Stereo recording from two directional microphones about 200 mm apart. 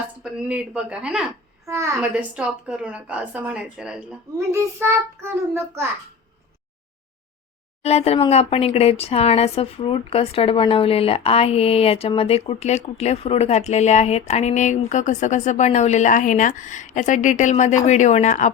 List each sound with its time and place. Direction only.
0.2 s a woman's voice: 5° right (ahead or behind)
1.6 s a woman's voice: 15° right (ahead or behind)
7.8 s speech: 30° left (ahead or behind)